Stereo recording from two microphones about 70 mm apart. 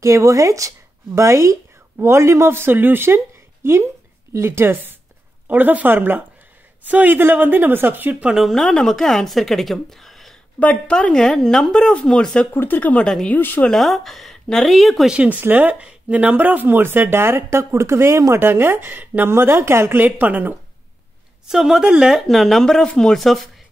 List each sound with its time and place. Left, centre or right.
0.0 s a woman's voice: right
8.4 s a woman's voice: centre
10.6 s speech: centre
12.5 s speech: left
13.0 s speech: centre
13.4 s speech: left
13.7 s a woman's voice: centre
15.0 s speech: centre
21.5 s a woman's voice: centre
21.8 s speech: centre
22.1 s a woman's voice: centre